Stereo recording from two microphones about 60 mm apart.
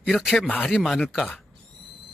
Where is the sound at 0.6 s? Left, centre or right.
Centre.